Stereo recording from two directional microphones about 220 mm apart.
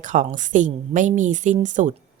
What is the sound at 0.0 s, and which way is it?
Speech, 35° right (ahead or behind).